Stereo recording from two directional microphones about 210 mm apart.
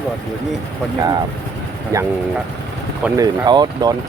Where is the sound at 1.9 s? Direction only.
15° right (ahead or behind).